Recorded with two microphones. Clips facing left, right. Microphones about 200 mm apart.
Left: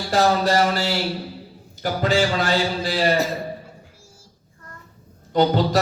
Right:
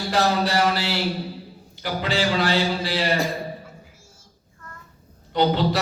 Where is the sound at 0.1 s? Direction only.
45° left (ahead or behind).